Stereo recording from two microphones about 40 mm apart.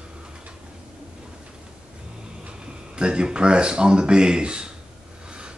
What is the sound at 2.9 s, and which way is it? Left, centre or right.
Speech, right.